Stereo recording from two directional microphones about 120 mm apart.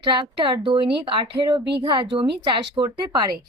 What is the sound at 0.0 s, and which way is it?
Speech, 45° right (ahead or behind).